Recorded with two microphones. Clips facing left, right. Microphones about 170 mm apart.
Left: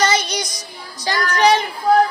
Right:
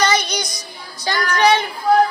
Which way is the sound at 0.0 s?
35° left (ahead or behind).